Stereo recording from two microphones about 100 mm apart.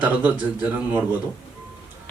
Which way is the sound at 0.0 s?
15° right (ahead or behind).